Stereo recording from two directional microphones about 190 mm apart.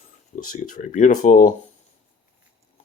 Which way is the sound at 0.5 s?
45° left (ahead or behind).